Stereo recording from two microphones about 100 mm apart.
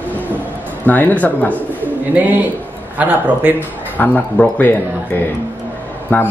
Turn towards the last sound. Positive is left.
turn(degrees=20)  # may be behind; listen again after turning